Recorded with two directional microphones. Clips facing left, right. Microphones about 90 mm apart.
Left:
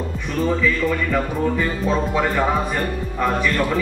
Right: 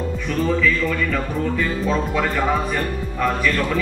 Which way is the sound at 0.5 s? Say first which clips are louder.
Left 1 dB; 15° left (ahead or behind).